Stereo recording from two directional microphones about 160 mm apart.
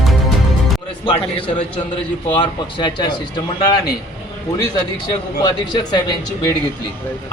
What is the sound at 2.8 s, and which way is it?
Speech, 30° left (ahead or behind).